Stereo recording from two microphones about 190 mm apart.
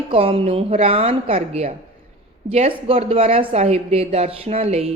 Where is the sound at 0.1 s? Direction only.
30° right (ahead or behind).